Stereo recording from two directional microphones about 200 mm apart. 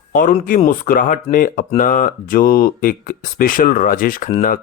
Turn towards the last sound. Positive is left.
turn(degrees=40)  # may be behind; listen again after turning